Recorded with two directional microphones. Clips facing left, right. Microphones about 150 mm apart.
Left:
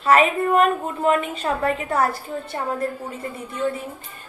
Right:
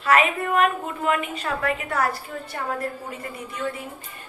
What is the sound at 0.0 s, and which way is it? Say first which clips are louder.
A woman's voice: left 3 dB; 35° left (ahead or behind).